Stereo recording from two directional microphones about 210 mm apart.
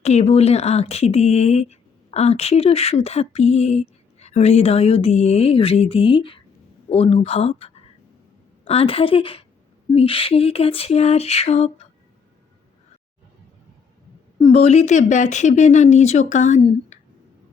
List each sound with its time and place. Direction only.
0.0 s speech: 30° left (ahead or behind)
14.5 s speech: 30° left (ahead or behind)